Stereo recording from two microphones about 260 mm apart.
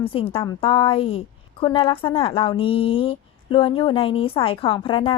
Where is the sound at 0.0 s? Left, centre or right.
Left.